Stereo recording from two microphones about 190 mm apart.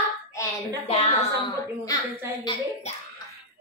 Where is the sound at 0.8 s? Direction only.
30° left (ahead or behind).